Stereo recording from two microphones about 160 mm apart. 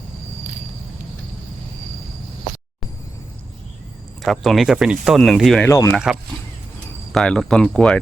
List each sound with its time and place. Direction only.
4.2 s speech: centre (ahead or behind)
5.6 s speech: 15° left (ahead or behind)
7.1 s speech: 5° left (ahead or behind)